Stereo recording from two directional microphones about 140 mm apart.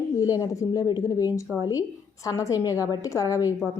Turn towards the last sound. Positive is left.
turn(degrees=25)  # may be behind; listen again after turning